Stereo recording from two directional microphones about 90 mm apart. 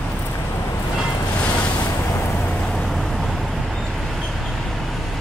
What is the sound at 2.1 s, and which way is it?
Vehicle, 20° left (ahead or behind).